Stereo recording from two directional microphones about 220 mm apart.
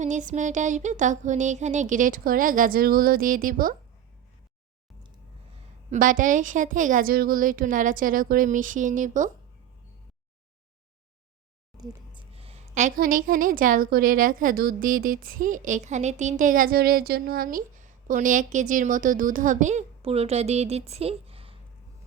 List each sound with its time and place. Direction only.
0.0 s a woman's voice: 35° right (ahead or behind)
5.9 s a woman's voice: 35° right (ahead or behind)
11.8 s a woman's voice: 25° right (ahead or behind)